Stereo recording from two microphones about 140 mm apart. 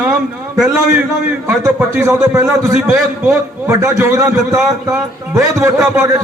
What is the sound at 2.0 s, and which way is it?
A man's voice, 20° right (ahead or behind).